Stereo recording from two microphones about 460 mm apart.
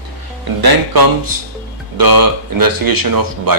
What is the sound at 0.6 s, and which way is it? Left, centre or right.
Speech, right.